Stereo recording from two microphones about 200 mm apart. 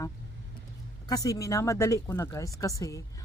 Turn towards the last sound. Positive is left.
turn(degrees=15)  # may be behind; listen again after turning